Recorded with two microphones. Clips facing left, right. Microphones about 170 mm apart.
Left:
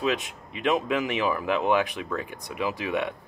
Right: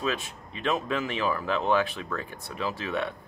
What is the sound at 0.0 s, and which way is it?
Speech, 15° left (ahead or behind).